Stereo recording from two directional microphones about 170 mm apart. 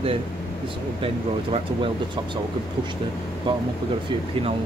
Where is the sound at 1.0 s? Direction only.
35° right (ahead or behind).